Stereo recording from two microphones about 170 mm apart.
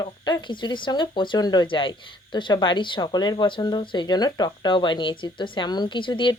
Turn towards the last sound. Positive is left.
turn(degrees=30)  # may be behind; listen again after turning